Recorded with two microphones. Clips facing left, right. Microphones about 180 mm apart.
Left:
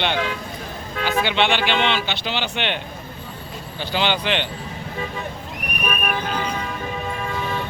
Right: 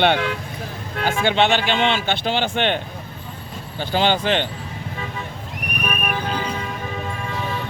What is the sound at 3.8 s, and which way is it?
Speech, 45° right (ahead or behind).